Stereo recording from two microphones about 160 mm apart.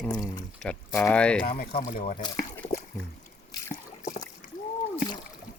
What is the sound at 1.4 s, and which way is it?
Speech, 65° left (ahead or behind).